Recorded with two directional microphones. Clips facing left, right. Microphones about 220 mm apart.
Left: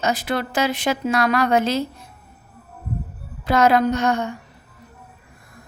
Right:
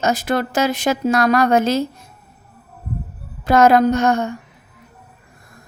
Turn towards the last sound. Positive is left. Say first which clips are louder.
# right 4 dB
turn(degrees=-45)  # may be behind; listen again after turning